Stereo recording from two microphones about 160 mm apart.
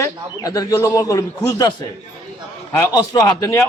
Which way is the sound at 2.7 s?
20° left (ahead or behind).